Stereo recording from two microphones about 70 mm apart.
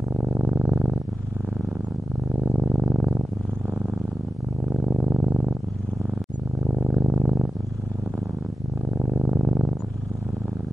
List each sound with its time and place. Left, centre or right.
0.2 s purr: centre
2.4 s purr: centre
4.7 s music: centre
6.7 s purr: centre
8.9 s purr: centre
9.2 s music: centre